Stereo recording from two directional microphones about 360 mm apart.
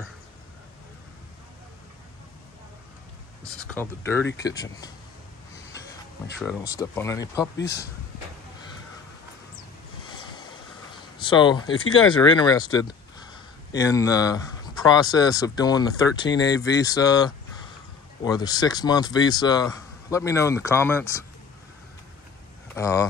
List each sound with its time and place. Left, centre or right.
3.6 s speech: centre
6.4 s speech: centre
7.5 s speech: left
11.1 s speech: centre
22.8 s speech: centre